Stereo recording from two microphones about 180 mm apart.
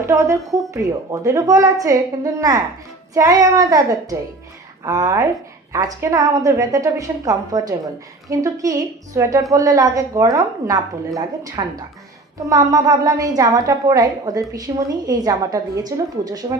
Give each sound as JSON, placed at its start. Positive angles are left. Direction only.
{"t": 0.0, "sound": "a woman's voice", "side_deg": -15}